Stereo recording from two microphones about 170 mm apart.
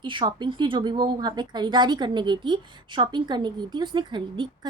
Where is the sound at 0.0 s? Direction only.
30° right (ahead or behind).